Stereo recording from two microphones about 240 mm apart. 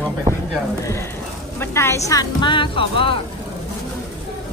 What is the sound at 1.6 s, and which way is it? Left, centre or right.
A woman's voice, centre.